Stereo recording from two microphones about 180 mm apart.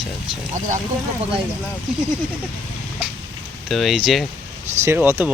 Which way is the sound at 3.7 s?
Centre (ahead or behind).